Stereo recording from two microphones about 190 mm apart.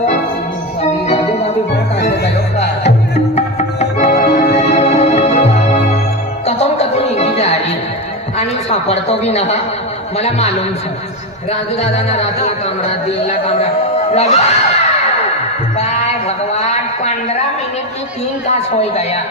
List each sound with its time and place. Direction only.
2.0 s music: 60° left (ahead or behind)
3.3 s music: 40° left (ahead or behind)
8.4 s a man's voice: 35° left (ahead or behind)
11.8 s speech: 35° left (ahead or behind)
13.3 s speech: 30° left (ahead or behind)
16.5 s a sound: 35° left (ahead or behind)
18.5 s speech: 35° left (ahead or behind)